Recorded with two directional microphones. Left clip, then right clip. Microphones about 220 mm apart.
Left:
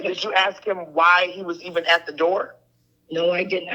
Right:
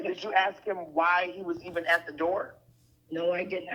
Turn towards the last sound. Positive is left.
turn(degrees=35)  # may be behind; listen again after turning